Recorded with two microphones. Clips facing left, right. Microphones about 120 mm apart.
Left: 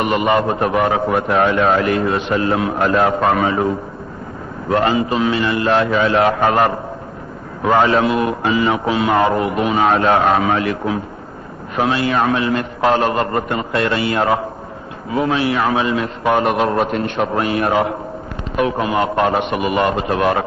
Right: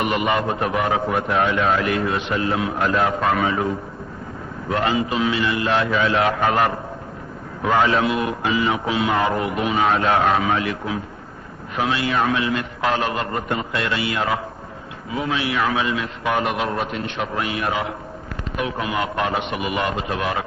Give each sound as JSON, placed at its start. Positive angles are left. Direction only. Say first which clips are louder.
{"t": 0.0, "sound": "a man's voice", "louder": "left 5 dB", "side_deg": 40}
{"t": 4.7, "sound": "a man's voice", "louder": "left 5 dB", "side_deg": 45}